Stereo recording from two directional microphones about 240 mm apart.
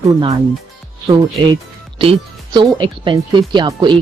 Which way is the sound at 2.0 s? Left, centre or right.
Right.